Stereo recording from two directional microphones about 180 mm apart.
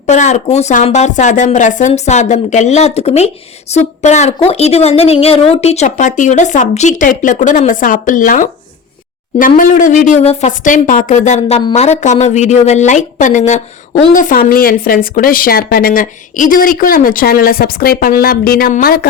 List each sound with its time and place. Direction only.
0.0 s a woman's voice: 40° left (ahead or behind)
9.6 s a woman's voice: 45° left (ahead or behind)